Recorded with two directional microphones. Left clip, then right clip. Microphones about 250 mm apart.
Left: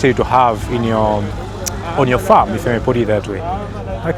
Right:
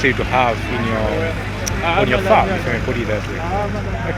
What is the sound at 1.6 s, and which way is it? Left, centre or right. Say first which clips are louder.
Speech: even; left.